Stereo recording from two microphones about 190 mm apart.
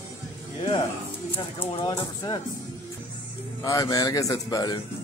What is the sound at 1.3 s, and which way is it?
Speech, 25° left (ahead or behind).